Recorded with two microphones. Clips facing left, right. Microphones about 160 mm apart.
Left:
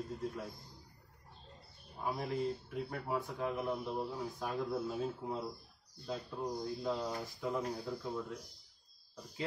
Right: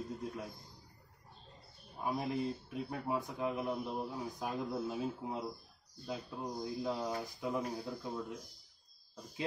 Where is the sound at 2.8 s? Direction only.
15° right (ahead or behind).